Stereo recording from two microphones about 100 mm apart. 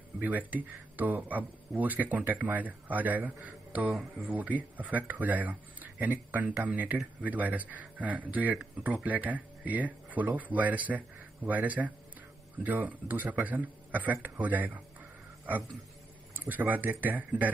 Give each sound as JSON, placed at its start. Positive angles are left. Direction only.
{"t": 0.2, "sound": "speech", "side_deg": -15}
{"t": 16.4, "sound": "speech", "side_deg": -20}